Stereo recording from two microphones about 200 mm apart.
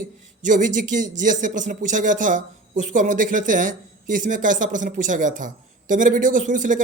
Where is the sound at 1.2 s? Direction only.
40° right (ahead or behind).